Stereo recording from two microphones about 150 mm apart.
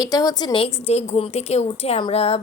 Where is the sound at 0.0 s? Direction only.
25° left (ahead or behind).